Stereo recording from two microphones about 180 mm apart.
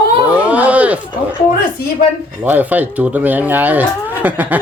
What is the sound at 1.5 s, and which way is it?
Speech, 50° left (ahead or behind).